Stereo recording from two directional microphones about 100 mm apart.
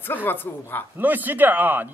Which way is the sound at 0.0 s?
20° left (ahead or behind).